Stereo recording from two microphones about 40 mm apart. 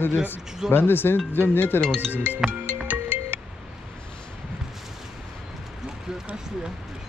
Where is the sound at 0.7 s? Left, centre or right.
Left.